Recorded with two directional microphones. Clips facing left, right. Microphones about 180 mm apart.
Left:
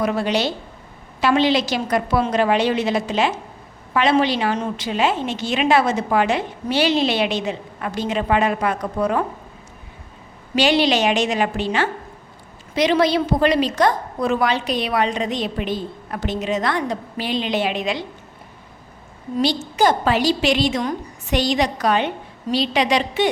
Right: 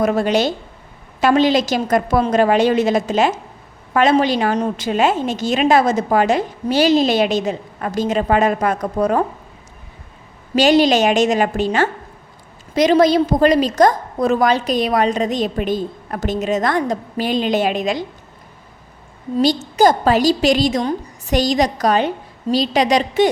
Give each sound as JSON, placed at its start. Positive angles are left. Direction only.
{"t": 0.0, "sound": "a woman's voice", "side_deg": -45}
{"t": 10.5, "sound": "a woman's voice", "side_deg": -40}
{"t": 19.4, "sound": "a woman's voice", "side_deg": -40}